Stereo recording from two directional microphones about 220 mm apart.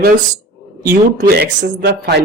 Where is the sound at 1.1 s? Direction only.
45° right (ahead or behind).